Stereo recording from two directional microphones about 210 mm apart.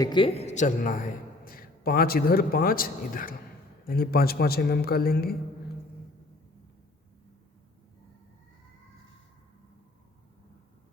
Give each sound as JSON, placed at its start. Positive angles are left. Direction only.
{"t": 0.0, "sound": "a man's voice", "side_deg": 20}